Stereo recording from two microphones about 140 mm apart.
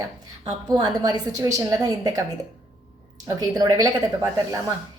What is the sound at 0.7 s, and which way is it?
A woman's voice, 30° right (ahead or behind).